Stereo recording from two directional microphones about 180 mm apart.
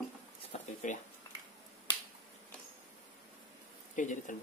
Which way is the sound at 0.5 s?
35° left (ahead or behind).